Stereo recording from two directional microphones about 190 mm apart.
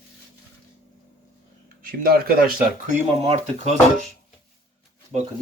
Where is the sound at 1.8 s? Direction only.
50° right (ahead or behind).